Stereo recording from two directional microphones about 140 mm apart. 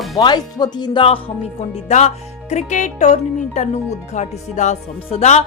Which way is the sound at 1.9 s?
55° left (ahead or behind).